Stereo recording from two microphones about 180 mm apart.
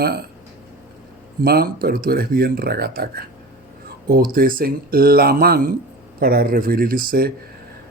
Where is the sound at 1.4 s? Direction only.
55° right (ahead or behind).